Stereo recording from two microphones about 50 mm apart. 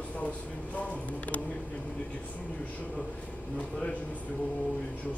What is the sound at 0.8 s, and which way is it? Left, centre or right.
Speech, left.